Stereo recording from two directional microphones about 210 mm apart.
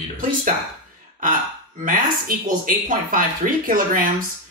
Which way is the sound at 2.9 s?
40° right (ahead or behind).